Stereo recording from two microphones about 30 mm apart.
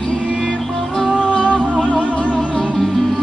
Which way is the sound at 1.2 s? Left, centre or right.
Left.